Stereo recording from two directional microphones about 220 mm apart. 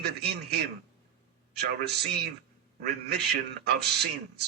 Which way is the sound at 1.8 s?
50° right (ahead or behind).